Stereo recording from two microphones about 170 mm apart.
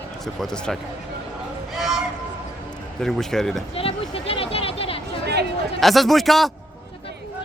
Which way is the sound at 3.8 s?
35° left (ahead or behind).